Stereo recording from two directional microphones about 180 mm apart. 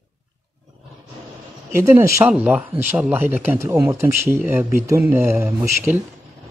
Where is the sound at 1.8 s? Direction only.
15° right (ahead or behind).